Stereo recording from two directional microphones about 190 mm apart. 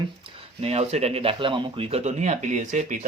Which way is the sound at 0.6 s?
35° right (ahead or behind).